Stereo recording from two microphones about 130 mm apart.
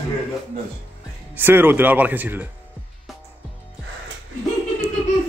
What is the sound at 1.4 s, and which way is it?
Speech, 15° right (ahead or behind).